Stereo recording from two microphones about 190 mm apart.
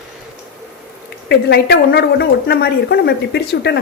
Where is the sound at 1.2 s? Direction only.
60° left (ahead or behind).